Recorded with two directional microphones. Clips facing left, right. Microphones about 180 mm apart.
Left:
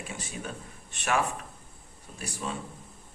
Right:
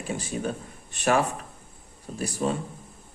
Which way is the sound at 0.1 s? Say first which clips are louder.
Right 13 dB; 35° right (ahead or behind).